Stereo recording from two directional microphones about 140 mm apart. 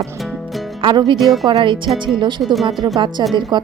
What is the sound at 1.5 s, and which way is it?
Speech, 35° right (ahead or behind).